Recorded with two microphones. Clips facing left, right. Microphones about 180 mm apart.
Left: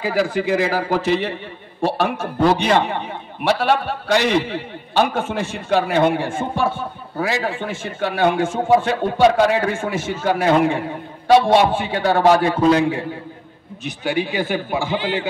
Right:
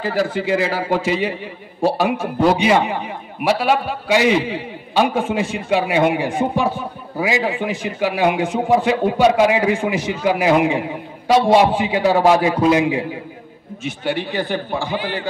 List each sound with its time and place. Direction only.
0.0 s a man's voice: centre (ahead or behind)
14.0 s a man's voice: 10° left (ahead or behind)
15.0 s a man's voice: 20° left (ahead or behind)